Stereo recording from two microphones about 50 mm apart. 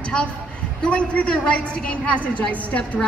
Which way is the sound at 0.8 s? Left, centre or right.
Left.